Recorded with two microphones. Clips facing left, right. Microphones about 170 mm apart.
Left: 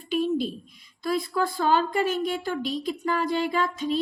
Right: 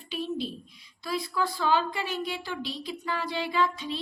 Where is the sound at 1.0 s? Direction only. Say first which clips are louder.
Left 4 dB; 50° left (ahead or behind).